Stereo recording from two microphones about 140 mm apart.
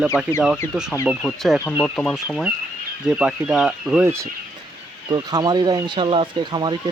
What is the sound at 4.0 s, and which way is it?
Speech, 20° right (ahead or behind).